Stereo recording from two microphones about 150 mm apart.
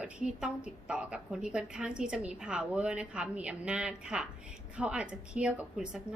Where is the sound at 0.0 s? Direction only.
5° right (ahead or behind).